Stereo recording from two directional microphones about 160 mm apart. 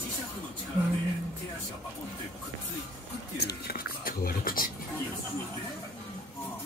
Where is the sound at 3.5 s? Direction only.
70° left (ahead or behind).